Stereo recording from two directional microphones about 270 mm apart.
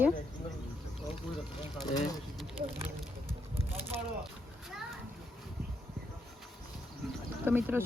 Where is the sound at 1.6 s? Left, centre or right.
Centre.